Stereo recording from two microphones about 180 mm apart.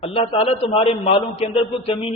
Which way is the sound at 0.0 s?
30° left (ahead or behind).